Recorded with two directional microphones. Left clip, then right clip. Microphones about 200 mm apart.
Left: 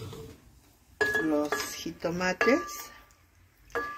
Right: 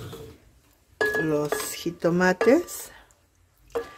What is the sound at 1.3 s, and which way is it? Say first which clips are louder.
Speech: right 3 dB; 55° right (ahead or behind).